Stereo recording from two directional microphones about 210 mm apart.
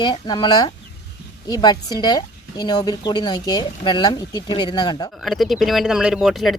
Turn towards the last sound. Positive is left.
turn(degrees=0)  # may be behind; listen again after turning